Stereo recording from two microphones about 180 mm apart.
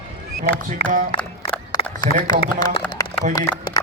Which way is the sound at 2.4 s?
30° left (ahead or behind).